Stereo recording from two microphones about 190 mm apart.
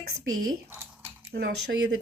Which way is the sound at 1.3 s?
55° right (ahead or behind).